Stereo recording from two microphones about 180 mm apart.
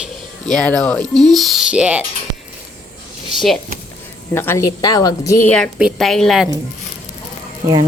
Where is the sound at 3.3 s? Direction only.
Centre (ahead or behind).